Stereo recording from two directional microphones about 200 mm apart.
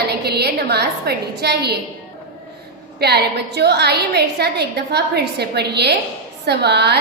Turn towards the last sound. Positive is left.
turn(degrees=-55)  # may be behind; listen again after turning